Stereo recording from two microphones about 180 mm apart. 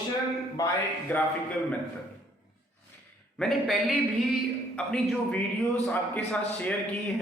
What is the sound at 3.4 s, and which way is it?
A man's voice, centre (ahead or behind).